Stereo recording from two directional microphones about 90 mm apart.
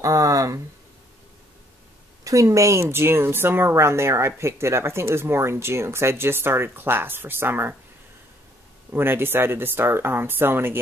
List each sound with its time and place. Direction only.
0.0 s speech: 40° right (ahead or behind)
2.2 s speech: 40° right (ahead or behind)
8.9 s speech: 25° right (ahead or behind)